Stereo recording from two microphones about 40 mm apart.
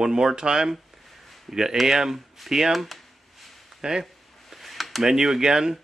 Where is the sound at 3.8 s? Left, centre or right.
Centre.